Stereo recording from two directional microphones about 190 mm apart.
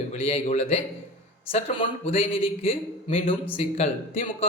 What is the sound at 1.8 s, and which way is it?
A man's voice, 30° left (ahead or behind).